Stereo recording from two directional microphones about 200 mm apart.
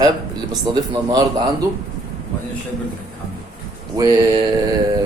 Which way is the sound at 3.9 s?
15° right (ahead or behind).